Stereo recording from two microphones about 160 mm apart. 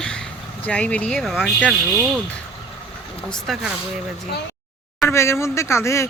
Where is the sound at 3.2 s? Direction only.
Centre (ahead or behind).